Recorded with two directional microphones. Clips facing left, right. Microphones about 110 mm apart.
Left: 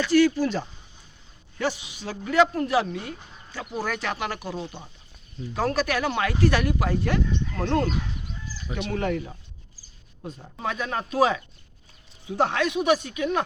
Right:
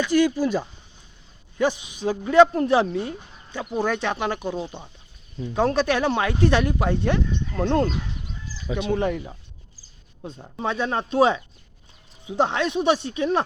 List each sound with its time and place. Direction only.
0.0 s speech: 15° right (ahead or behind)
8.9 s speech: 20° right (ahead or behind)
10.2 s speech: 30° right (ahead or behind)